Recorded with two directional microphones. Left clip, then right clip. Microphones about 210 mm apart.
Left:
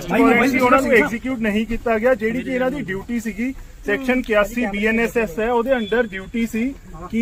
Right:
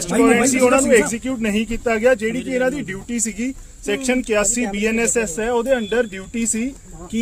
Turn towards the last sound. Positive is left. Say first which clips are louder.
# even
turn(degrees=-40)  # may be behind; listen again after turning